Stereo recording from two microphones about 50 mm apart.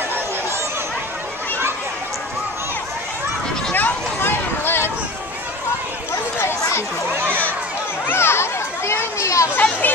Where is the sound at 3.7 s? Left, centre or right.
Left.